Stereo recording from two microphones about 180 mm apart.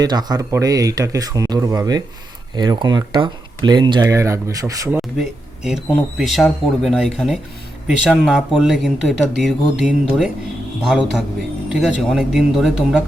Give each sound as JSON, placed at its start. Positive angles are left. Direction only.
{"t": 0.0, "sound": "speech", "side_deg": -20}
{"t": 5.1, "sound": "speech", "side_deg": 0}
{"t": 11.7, "sound": "speech", "side_deg": -5}